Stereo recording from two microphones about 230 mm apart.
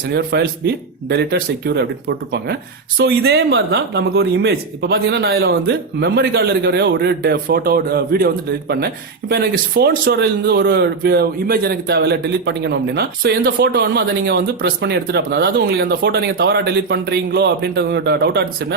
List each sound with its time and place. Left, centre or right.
0.1 s a man's voice: right